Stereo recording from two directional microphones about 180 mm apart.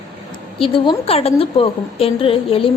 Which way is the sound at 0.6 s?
30° left (ahead or behind).